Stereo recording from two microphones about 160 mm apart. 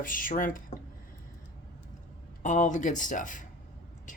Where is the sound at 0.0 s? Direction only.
60° left (ahead or behind).